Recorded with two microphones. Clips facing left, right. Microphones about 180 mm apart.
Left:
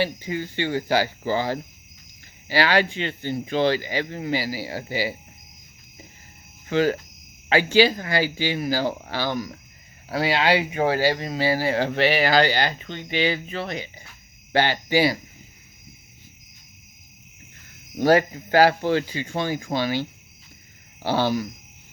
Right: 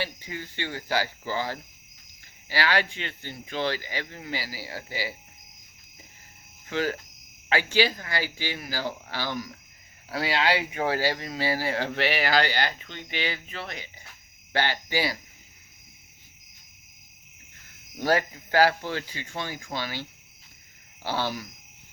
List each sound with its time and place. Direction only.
0.0 s speech: 20° left (ahead or behind)
6.7 s speech: 25° left (ahead or behind)
14.9 s speech: 20° left (ahead or behind)
18.5 s speech: 20° left (ahead or behind)